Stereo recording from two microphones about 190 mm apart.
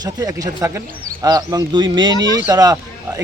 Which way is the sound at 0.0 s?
20° right (ahead or behind).